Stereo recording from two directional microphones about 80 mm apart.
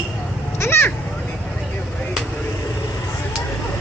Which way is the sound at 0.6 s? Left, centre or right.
Left.